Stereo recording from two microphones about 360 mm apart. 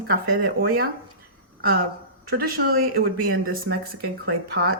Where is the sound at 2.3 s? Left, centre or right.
Right.